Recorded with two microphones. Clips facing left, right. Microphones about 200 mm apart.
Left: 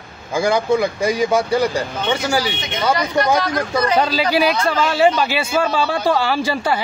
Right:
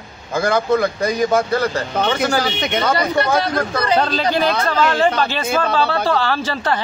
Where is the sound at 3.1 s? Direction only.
30° right (ahead or behind).